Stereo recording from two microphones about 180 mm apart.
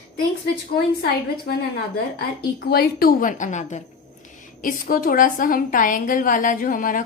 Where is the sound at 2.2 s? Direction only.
60° left (ahead or behind).